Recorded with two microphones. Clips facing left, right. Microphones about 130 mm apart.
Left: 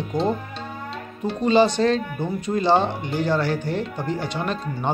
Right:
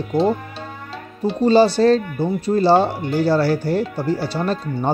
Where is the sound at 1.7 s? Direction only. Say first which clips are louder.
Right 6 dB; 35° right (ahead or behind).